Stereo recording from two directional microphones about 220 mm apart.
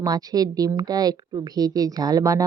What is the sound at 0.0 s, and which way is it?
A woman's voice, 15° right (ahead or behind).